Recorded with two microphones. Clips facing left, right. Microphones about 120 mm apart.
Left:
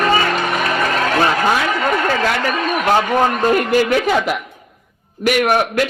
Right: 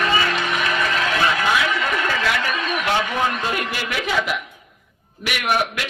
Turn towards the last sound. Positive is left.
turn(degrees=45)  # may be behind; listen again after turning